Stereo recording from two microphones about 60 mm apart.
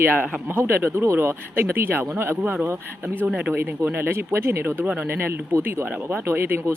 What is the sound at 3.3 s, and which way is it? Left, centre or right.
Speech, right.